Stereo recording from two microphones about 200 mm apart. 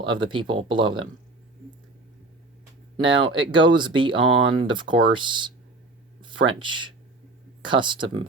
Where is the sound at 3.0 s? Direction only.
25° right (ahead or behind).